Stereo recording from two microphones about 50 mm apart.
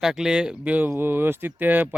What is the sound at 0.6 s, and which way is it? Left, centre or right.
Speech, right.